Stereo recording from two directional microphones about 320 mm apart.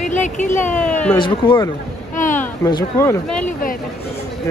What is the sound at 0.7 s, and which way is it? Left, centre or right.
A man's voice, centre.